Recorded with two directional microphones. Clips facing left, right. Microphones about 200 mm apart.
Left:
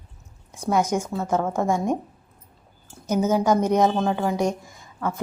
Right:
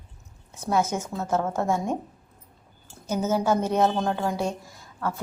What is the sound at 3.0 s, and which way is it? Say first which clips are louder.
A woman's voice: left 3 dB; 15° left (ahead or behind).